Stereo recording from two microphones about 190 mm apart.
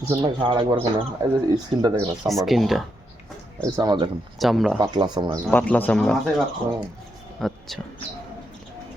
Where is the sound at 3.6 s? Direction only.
20° right (ahead or behind).